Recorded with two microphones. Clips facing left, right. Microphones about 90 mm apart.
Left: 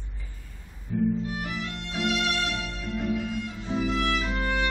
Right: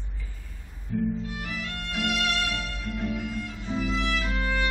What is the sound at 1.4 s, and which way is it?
Music, 25° left (ahead or behind).